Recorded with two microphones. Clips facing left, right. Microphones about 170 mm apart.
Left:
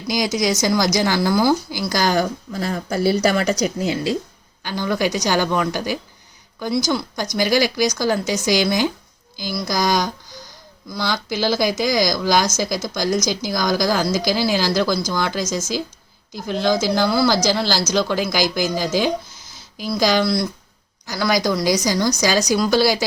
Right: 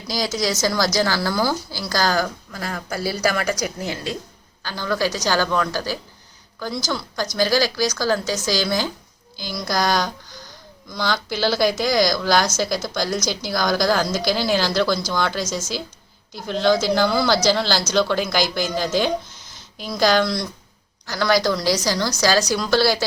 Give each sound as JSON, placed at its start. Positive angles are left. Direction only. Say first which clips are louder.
{"t": 0.1, "sound": "speech", "louder": "left 3 dB", "side_deg": 15}
{"t": 16.5, "sound": "speech", "louder": "right 1 dB", "side_deg": 10}